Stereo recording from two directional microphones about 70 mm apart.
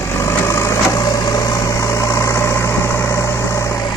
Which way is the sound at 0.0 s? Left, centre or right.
Left.